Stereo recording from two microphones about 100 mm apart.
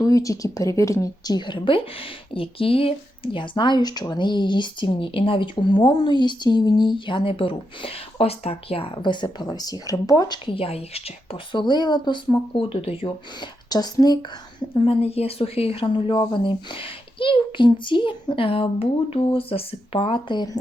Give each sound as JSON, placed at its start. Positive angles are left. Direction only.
{"t": 0.0, "sound": "speech", "side_deg": 35}
{"t": 3.3, "sound": "speech", "side_deg": 55}
{"t": 10.5, "sound": "a woman's voice", "side_deg": 75}
{"t": 11.5, "sound": "speech", "side_deg": 50}
{"t": 13.7, "sound": "speech", "side_deg": 40}
{"t": 14.7, "sound": "speech", "side_deg": 80}